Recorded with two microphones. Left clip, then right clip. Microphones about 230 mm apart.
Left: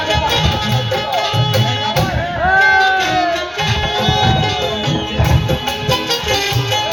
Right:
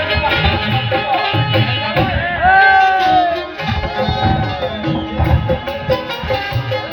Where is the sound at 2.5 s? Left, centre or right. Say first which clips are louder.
Right 2 dB; left.